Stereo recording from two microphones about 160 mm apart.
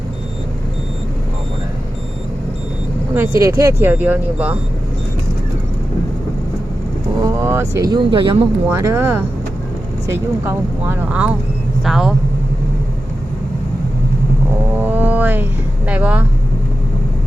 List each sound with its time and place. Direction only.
3.4 s speech: 15° right (ahead or behind)
7.2 s speech: 20° right (ahead or behind)
8.7 s speech: 15° right (ahead or behind)
14.8 s music: 10° right (ahead or behind)
15.9 s speech: 10° right (ahead or behind)